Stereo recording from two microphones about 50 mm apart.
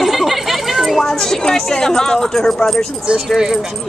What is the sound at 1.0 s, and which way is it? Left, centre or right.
Speech, centre.